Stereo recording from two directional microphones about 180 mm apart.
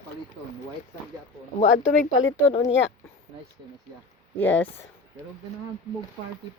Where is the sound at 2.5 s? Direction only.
35° left (ahead or behind).